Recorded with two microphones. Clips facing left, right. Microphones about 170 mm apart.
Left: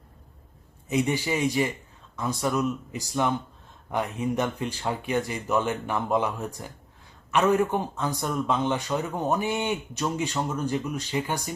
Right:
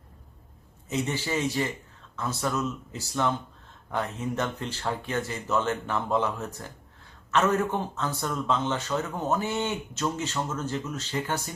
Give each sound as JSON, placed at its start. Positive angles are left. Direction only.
{"t": 0.9, "sound": "a man's voice", "side_deg": 15}